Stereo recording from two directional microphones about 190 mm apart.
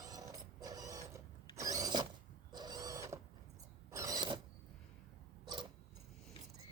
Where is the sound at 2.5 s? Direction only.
20° right (ahead or behind).